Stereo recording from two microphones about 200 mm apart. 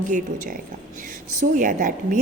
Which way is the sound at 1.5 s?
40° right (ahead or behind).